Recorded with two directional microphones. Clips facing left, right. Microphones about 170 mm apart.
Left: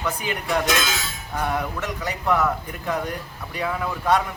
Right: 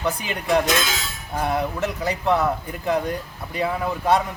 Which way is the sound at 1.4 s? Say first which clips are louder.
Right 3 dB; 25° right (ahead or behind).